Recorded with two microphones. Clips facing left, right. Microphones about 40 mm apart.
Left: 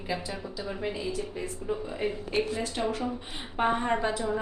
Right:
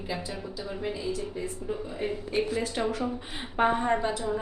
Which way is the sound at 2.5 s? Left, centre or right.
Centre.